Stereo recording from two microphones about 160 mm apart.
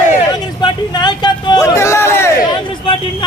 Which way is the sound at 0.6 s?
30° left (ahead or behind).